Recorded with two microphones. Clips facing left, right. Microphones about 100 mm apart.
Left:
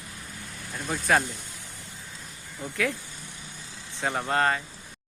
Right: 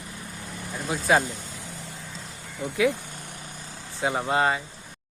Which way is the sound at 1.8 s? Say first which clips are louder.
Right 5 dB; 90° right.